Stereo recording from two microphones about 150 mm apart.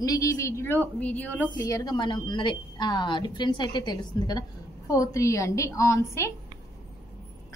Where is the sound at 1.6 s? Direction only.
25° left (ahead or behind).